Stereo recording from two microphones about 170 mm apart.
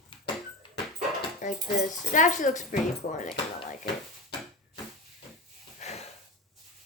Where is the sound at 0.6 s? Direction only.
30° left (ahead or behind).